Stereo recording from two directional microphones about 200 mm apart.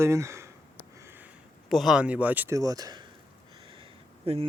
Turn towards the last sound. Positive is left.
turn(degrees=-30)  # may be behind; listen again after turning